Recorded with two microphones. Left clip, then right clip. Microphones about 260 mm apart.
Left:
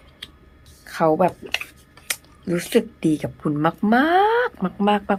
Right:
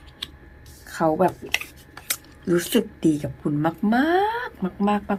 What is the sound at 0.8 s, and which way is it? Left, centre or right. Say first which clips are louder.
Speech: left 2 dB; centre.